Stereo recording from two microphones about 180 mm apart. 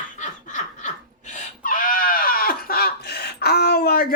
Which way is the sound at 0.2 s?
45° left (ahead or behind).